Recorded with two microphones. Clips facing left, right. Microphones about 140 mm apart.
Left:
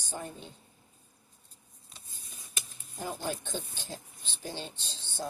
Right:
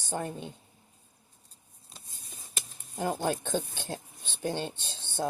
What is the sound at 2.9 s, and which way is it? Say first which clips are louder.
A woman's voice: right 6 dB; 60° right (ahead or behind).